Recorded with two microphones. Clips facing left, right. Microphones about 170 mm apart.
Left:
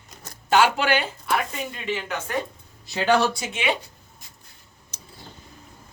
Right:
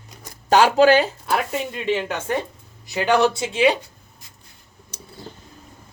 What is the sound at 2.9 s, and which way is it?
Speech, 15° right (ahead or behind).